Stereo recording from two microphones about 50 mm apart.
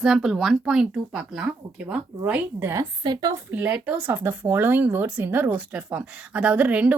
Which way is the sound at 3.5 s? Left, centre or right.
Right.